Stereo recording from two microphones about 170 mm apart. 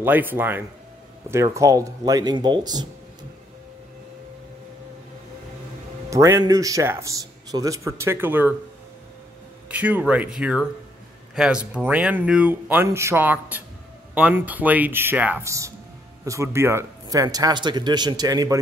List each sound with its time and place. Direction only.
0.0 s a man's voice: 10° right (ahead or behind)
6.0 s a man's voice: 20° right (ahead or behind)
9.7 s a man's voice: 10° right (ahead or behind)